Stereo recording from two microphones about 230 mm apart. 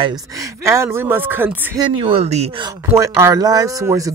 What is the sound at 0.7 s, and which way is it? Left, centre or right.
Speech, centre.